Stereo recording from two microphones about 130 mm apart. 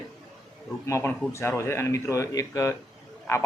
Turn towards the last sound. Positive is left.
turn(degrees=25)  # may be behind; listen again after turning